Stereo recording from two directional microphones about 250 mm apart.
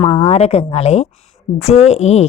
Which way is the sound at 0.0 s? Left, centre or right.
Left.